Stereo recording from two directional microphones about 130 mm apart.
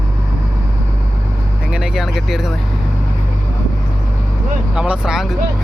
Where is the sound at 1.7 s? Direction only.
5° right (ahead or behind).